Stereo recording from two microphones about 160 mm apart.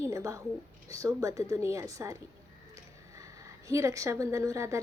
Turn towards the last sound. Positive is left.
turn(degrees=-20)  # may be behind; listen again after turning